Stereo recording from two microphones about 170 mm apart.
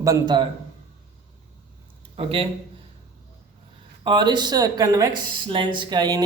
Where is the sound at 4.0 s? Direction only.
25° right (ahead or behind).